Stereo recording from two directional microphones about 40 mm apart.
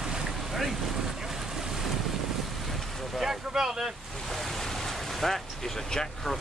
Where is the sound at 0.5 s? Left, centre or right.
Centre.